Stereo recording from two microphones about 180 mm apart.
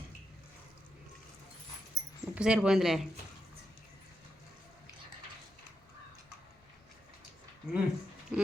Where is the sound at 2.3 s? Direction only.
5° right (ahead or behind).